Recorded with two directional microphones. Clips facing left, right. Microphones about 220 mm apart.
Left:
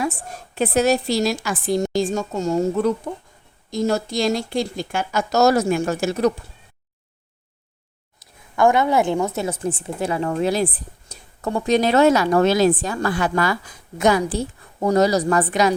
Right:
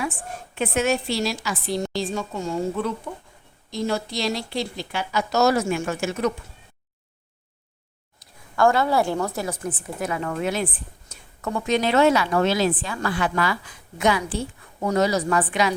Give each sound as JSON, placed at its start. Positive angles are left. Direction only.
{"t": 0.0, "sound": "a woman's voice", "side_deg": 40}
{"t": 8.5, "sound": "a woman's voice", "side_deg": 20}